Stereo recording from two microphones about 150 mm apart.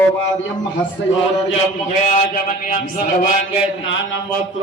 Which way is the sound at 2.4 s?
70° left (ahead or behind).